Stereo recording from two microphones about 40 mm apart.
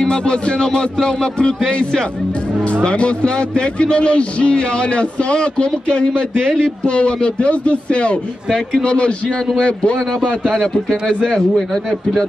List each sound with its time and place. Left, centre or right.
0.0 s a man's voice: left
9.9 s a man's voice: centre
11.7 s a man's voice: centre